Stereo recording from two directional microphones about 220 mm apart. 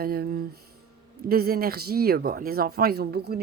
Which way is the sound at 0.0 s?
45° right (ahead or behind).